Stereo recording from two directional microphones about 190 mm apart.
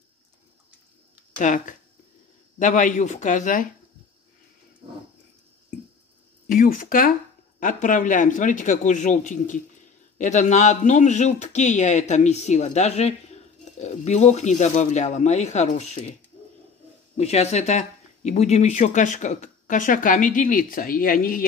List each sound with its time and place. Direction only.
1.4 s speech: 40° left (ahead or behind)
4.8 s dog: 25° right (ahead or behind)
6.4 s speech: 45° left (ahead or behind)
17.2 s speech: 35° left (ahead or behind); by 21.5 s 50° left (ahead or behind)